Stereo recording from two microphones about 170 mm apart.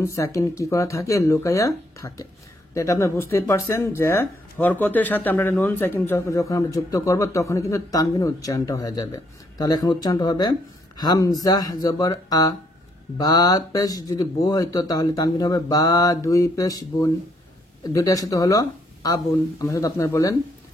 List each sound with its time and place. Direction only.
0.0 s speech: 20° left (ahead or behind)